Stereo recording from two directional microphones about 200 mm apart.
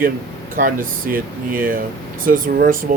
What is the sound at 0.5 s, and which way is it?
Speech, 45° right (ahead or behind).